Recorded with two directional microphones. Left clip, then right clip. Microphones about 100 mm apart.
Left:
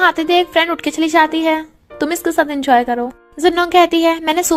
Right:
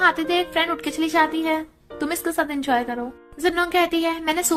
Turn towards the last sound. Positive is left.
turn(degrees=55)  # may be behind; listen again after turning